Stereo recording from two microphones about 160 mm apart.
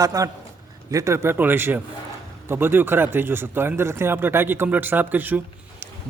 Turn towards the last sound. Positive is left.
turn(degrees=-10)  # may be behind; listen again after turning